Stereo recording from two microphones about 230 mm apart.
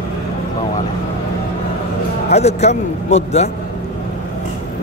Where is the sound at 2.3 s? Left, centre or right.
Left.